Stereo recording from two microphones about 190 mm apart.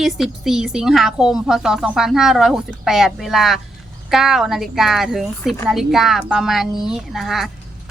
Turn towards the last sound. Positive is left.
turn(degrees=0)  # may be behind; listen again after turning